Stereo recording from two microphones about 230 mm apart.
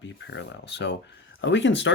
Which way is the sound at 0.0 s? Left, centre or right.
Left.